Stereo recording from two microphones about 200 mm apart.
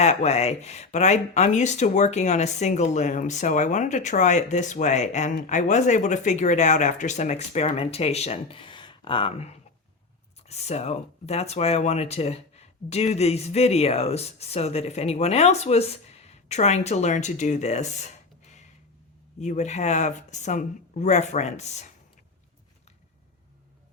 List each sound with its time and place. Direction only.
0.0 s speech: 35° left (ahead or behind)
19.4 s speech: 35° left (ahead or behind)